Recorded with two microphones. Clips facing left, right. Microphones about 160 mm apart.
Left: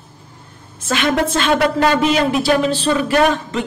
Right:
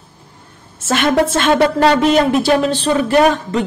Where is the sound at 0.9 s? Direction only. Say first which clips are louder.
Right 3 dB; 45° right (ahead or behind).